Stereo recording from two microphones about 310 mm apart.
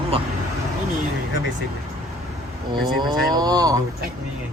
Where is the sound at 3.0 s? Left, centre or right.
Centre.